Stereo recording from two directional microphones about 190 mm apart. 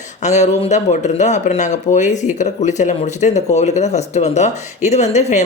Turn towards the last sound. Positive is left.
turn(degrees=35)  # may be behind; listen again after turning